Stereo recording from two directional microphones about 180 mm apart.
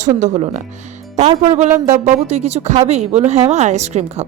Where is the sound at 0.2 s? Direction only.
40° right (ahead or behind).